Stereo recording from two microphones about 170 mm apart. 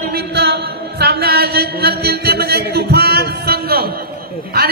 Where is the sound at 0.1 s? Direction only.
75° right (ahead or behind).